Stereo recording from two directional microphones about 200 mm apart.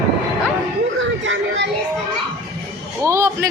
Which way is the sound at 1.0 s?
70° right (ahead or behind).